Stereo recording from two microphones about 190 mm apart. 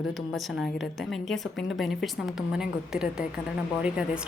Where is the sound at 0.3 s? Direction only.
Centre (ahead or behind).